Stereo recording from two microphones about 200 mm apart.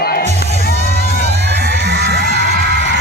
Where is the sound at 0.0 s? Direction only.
45° left (ahead or behind).